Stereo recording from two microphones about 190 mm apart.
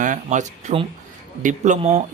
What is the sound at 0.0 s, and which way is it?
A man's voice, 40° right (ahead or behind).